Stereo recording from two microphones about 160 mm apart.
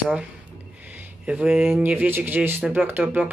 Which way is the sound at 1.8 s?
10° right (ahead or behind).